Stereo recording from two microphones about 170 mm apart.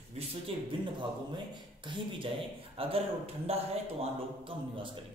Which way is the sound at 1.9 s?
30° right (ahead or behind).